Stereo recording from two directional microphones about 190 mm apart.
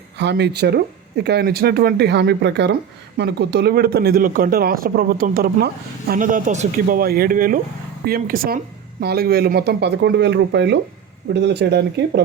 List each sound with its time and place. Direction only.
0.2 s a man's voice: 65° right (ahead or behind)